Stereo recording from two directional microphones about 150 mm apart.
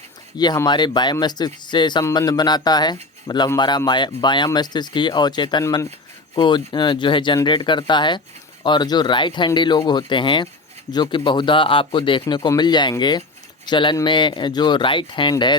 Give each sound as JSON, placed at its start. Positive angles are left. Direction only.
{"t": 0.3, "sound": "speech", "side_deg": 25}
{"t": 5.6, "sound": "speech", "side_deg": 20}
{"t": 6.3, "sound": "speech", "side_deg": 35}